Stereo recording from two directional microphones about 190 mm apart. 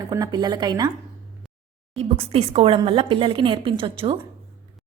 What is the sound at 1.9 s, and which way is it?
A woman's voice, 30° right (ahead or behind).